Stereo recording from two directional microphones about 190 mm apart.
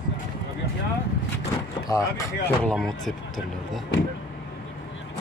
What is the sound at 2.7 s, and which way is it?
Speech, centre (ahead or behind).